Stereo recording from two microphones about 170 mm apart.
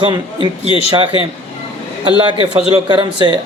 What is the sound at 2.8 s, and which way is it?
Speech, 25° right (ahead or behind).